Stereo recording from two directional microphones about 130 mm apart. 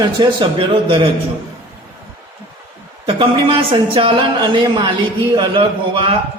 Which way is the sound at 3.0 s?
45° right (ahead or behind).